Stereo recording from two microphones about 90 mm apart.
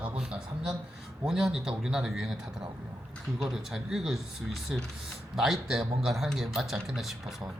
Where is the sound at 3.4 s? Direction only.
5° right (ahead or behind).